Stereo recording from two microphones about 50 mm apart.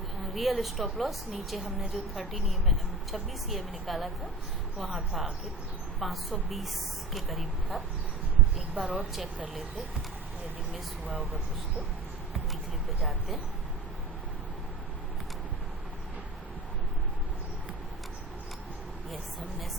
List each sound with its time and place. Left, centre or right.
0.3 s a woman's voice: centre
8.7 s a woman's voice: right
13.1 s a woman's voice: centre